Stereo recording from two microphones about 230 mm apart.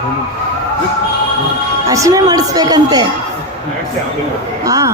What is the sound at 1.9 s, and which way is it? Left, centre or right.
A woman's voice, centre.